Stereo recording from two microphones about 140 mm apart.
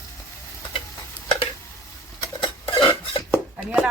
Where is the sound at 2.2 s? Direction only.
35° left (ahead or behind).